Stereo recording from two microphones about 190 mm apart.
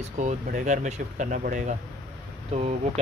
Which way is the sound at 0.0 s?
40° right (ahead or behind).